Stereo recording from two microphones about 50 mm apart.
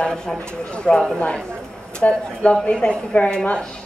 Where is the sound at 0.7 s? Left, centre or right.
Centre.